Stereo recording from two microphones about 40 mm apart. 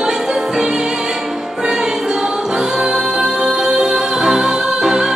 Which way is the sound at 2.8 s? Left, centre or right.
Centre.